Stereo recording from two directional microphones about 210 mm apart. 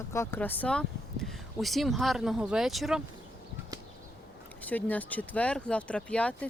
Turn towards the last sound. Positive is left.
turn(degrees=5)  # may be behind; listen again after turning